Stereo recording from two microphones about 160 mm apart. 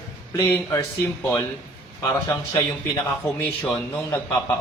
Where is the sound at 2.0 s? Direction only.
20° left (ahead or behind).